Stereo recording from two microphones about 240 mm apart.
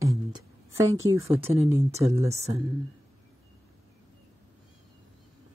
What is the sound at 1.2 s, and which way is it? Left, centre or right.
Speech, right.